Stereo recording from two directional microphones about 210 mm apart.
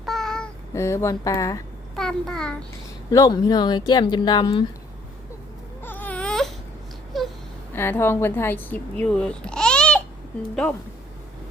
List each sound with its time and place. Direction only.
0.0 s child singing: centre (ahead or behind)
0.7 s speech: 15° left (ahead or behind)
2.0 s a child's voice: centre (ahead or behind)
3.1 s speech: 15° left (ahead or behind)
5.8 s baby cry: 10° left (ahead or behind)
7.1 s wail: centre (ahead or behind)
7.8 s a child's voice: 10° left (ahead or behind)